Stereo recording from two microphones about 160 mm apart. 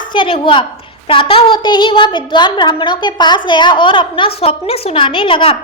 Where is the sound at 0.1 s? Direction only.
30° left (ahead or behind).